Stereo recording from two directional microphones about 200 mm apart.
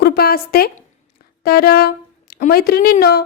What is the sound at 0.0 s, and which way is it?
A woman's voice, 50° left (ahead or behind).